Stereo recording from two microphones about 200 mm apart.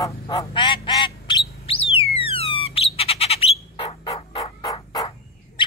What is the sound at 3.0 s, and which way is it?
Squawk, 30° left (ahead or behind).